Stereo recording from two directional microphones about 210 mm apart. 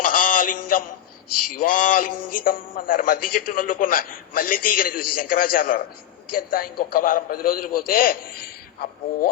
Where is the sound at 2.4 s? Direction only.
40° left (ahead or behind).